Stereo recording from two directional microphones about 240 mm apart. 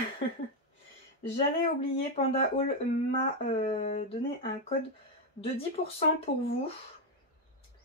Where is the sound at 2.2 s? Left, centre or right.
Left.